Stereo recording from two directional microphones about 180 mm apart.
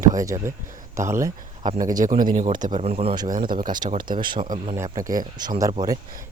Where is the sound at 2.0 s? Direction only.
50° right (ahead or behind).